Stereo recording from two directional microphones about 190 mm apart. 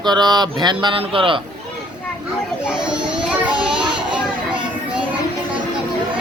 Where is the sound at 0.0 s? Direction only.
20° right (ahead or behind).